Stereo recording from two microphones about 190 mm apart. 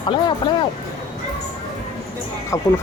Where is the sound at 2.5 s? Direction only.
15° left (ahead or behind).